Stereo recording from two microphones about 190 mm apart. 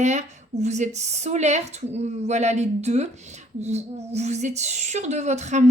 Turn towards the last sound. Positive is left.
turn(degrees=-35)  # may be behind; listen again after turning